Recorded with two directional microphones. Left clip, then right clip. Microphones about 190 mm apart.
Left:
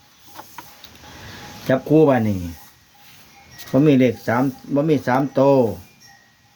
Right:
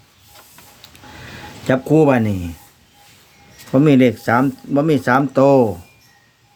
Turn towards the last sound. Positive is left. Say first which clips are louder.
# right 3 dB
turn(degrees=-25)  # may be behind; listen again after turning